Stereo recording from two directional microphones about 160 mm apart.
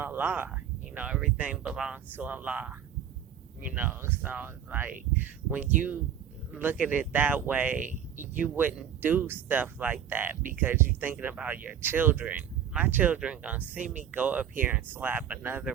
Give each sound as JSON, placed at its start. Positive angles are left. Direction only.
{"t": 0.0, "sound": "speech", "side_deg": -15}
{"t": 7.8, "sound": "speech", "side_deg": -55}
{"t": 8.3, "sound": "speech", "side_deg": -10}